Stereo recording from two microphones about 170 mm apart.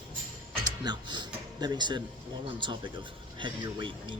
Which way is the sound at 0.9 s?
25° right (ahead or behind).